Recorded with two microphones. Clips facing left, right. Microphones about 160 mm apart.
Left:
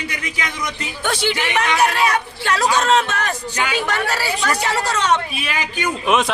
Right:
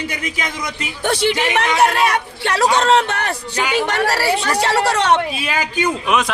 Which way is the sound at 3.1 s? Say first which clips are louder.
Right 1 dB; 65° right (ahead or behind).